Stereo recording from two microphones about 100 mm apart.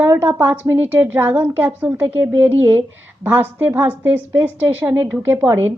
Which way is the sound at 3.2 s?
20° right (ahead or behind).